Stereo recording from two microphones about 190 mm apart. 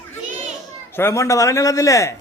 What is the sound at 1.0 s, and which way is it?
A man's voice, 15° left (ahead or behind).